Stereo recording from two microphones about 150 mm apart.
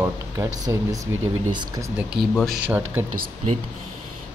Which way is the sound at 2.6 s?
10° right (ahead or behind).